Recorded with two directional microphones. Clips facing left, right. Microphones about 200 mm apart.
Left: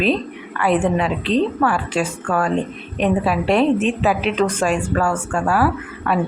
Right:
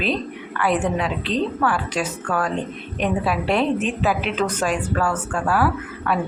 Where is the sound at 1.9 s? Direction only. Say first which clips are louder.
Left 3 dB; 10° left (ahead or behind).